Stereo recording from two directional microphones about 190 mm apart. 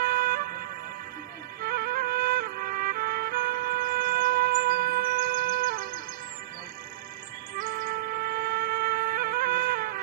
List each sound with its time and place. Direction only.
0.0 s vehicle: 50° right (ahead or behind)
1.6 s music: 55° right (ahead or behind)
7.5 s music: 50° right (ahead or behind)